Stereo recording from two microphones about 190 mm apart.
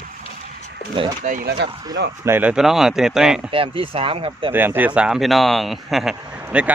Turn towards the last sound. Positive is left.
turn(degrees=-5)  # may be behind; listen again after turning